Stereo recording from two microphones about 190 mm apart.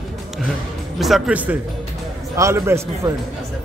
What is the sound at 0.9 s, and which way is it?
A man's voice, centre (ahead or behind).